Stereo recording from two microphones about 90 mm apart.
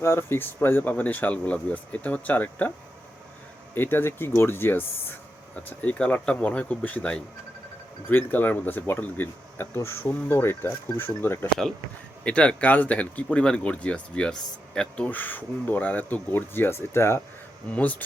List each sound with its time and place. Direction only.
0.0 s speech: 30° left (ahead or behind)
3.8 s speech: 25° left (ahead or behind)
12.2 s speech: 15° left (ahead or behind)
17.7 s speech: 15° left (ahead or behind)